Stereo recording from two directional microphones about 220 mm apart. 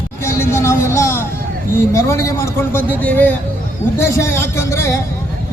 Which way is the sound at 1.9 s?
15° left (ahead or behind).